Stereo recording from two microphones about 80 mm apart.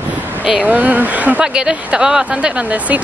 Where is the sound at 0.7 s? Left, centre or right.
Right.